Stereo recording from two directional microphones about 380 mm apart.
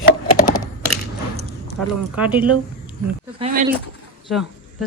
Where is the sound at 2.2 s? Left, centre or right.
Centre.